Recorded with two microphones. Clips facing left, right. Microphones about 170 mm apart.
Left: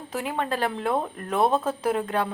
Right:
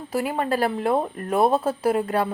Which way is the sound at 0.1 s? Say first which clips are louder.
Right 4 dB; 5° right (ahead or behind).